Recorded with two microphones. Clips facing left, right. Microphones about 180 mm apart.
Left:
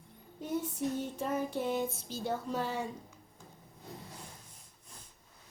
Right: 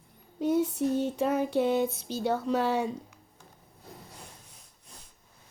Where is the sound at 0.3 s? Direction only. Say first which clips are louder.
Right 9 dB; 80° right.